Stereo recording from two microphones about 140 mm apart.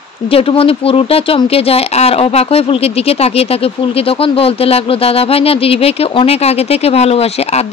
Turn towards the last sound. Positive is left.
turn(degrees=45)  # may be behind; listen again after turning